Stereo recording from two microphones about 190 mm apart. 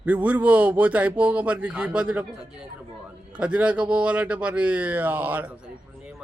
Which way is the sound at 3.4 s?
5° right (ahead or behind).